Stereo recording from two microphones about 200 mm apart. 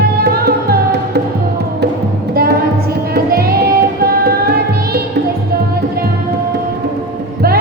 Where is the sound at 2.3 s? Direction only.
50° right (ahead or behind).